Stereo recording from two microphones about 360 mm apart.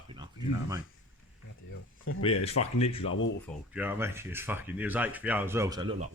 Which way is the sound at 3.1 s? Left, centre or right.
Left.